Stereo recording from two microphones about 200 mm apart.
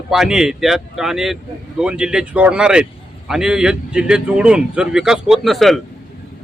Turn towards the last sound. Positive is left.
turn(degrees=0)  # may be behind; listen again after turning